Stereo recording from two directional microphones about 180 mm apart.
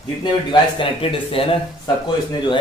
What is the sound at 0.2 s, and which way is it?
A man's voice, 25° left (ahead or behind).